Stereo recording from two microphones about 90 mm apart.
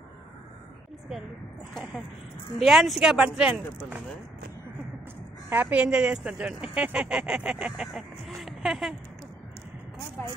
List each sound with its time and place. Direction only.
2.6 s speech: 5° right (ahead or behind)
5.5 s speech: 20° right (ahead or behind)
7.7 s speech: 5° right (ahead or behind)
10.2 s speech: 25° left (ahead or behind)